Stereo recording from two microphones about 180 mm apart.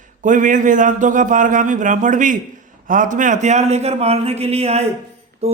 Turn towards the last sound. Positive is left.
turn(degrees=-35)  # may be behind; listen again after turning